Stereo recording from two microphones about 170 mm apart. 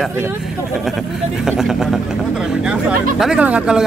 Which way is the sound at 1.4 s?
Centre (ahead or behind).